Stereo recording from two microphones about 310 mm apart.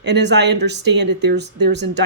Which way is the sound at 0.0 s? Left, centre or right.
Right.